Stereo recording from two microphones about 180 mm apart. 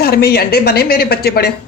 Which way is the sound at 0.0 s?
60° left (ahead or behind).